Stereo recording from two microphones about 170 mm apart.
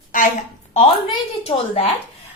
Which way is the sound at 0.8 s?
35° left (ahead or behind).